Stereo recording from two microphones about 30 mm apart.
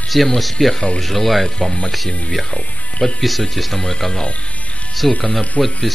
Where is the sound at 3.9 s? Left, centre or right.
Left.